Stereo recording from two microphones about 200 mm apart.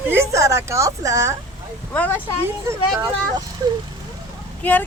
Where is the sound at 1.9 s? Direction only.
5° left (ahead or behind).